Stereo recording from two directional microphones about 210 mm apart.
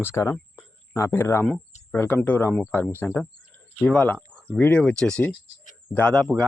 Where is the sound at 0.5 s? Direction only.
15° left (ahead or behind).